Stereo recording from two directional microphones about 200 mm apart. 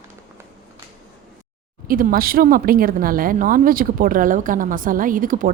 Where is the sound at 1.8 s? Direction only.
45° right (ahead or behind).